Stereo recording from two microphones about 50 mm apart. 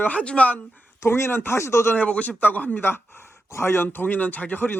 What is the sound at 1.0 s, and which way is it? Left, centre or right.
Speech, left.